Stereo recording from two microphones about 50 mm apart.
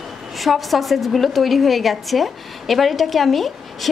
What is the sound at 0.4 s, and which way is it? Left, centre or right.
A woman's voice, centre.